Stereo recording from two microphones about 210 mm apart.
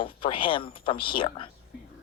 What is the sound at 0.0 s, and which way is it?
A man's voice, 25° left (ahead or behind).